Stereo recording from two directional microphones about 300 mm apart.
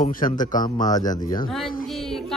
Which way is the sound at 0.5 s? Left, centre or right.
Centre.